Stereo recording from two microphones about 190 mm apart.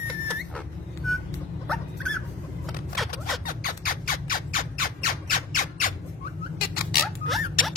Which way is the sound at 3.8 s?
45° left (ahead or behind).